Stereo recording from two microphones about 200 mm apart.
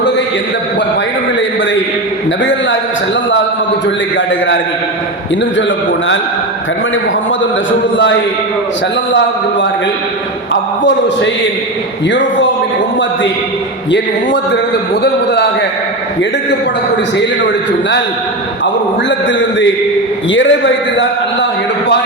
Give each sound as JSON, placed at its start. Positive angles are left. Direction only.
{"t": 2.4, "sound": "a man's voice", "side_deg": 65}
{"t": 3.8, "sound": "a man's voice", "side_deg": 65}
{"t": 10.5, "sound": "a man's voice", "side_deg": 65}
{"t": 13.9, "sound": "a man's voice", "side_deg": 65}
{"t": 17.7, "sound": "a man's voice", "side_deg": 60}